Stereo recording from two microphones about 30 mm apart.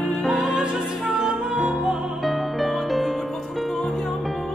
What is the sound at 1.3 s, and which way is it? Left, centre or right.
Music, right.